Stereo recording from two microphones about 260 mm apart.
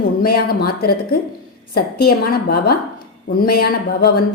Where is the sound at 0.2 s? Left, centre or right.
Left.